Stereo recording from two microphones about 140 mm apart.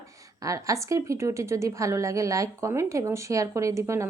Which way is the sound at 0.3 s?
25° right (ahead or behind).